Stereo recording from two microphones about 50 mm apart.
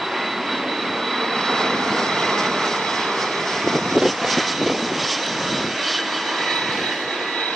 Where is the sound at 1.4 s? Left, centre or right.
Centre.